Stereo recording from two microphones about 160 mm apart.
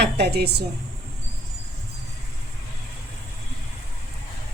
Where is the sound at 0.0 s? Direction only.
90° right.